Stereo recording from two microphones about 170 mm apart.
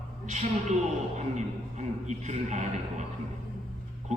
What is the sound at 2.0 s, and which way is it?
A man's voice, 45° right (ahead or behind).